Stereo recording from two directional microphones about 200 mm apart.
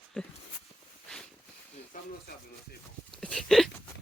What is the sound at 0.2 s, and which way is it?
Speech, 5° left (ahead or behind).